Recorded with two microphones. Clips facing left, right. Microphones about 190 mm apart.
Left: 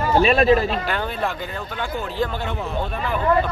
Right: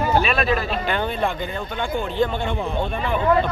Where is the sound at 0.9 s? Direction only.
5° left (ahead or behind).